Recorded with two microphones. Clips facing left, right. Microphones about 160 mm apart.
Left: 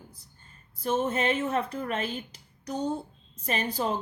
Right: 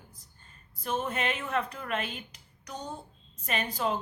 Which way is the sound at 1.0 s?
30° left (ahead or behind).